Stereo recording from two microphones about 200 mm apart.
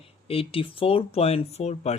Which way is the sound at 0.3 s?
30° left (ahead or behind).